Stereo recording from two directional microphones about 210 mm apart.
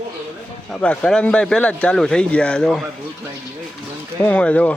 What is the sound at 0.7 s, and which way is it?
Speech, 5° left (ahead or behind).